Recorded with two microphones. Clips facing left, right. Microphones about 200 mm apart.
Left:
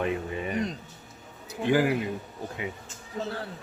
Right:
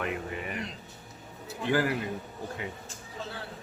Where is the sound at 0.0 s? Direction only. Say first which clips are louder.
Left 4 dB; 25° left (ahead or behind).